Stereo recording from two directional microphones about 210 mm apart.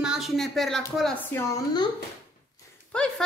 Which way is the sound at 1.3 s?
20° left (ahead or behind).